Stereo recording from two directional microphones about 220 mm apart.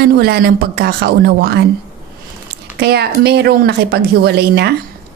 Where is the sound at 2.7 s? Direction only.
45° right (ahead or behind).